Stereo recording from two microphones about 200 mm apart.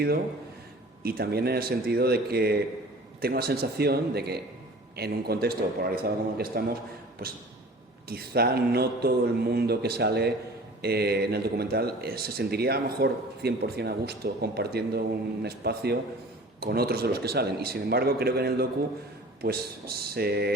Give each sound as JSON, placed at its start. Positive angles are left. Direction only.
{"t": 1.0, "sound": "speech", "side_deg": -50}